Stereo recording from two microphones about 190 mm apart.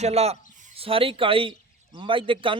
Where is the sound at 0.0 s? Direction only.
35° right (ahead or behind).